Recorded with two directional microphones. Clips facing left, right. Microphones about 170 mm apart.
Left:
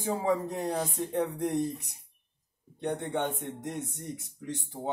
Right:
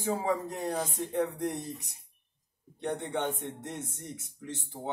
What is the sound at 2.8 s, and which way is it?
Speech, 15° left (ahead or behind).